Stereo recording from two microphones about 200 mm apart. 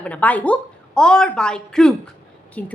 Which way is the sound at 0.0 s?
5° left (ahead or behind).